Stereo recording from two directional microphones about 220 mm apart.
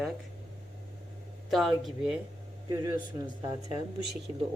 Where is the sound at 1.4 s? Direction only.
Centre (ahead or behind).